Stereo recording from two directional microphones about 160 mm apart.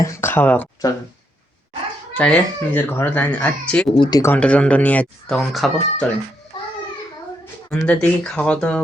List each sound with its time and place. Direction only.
0.0 s speech: 15° left (ahead or behind)
2.1 s speech: 10° left (ahead or behind)
3.8 s speech: 30° left (ahead or behind)
4.2 s speech: 10° left (ahead or behind)
7.9 s speech: 10° left (ahead or behind)